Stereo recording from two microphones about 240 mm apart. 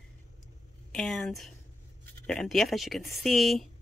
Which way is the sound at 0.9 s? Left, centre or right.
Centre.